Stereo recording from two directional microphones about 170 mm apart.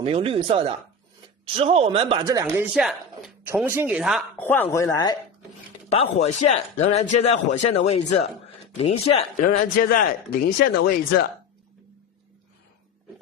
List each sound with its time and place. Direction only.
0.0 s speech: 35° right (ahead or behind)
2.2 s speech: 20° right (ahead or behind)
2.7 s speech: 5° right (ahead or behind)
3.4 s speech: 15° right (ahead or behind)
4.4 s speech: 10° left (ahead or behind)
5.9 s speech: 40° left (ahead or behind)
9.4 s a man's voice: 60° left (ahead or behind)